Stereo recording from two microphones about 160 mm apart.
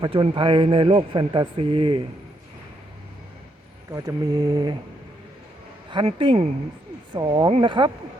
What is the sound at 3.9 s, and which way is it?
Speech, 20° right (ahead or behind).